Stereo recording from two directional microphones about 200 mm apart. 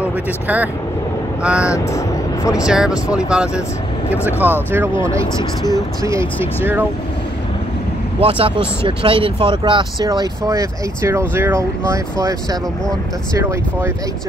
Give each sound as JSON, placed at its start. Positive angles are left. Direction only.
{"t": 0.0, "sound": "speech", "side_deg": -10}
{"t": 2.0, "sound": "speech", "side_deg": 15}
{"t": 2.6, "sound": "speech", "side_deg": -5}
{"t": 6.0, "sound": "speech", "side_deg": -10}
{"t": 8.2, "sound": "speech", "side_deg": -25}